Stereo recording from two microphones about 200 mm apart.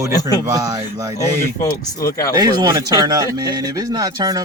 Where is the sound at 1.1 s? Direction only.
15° left (ahead or behind).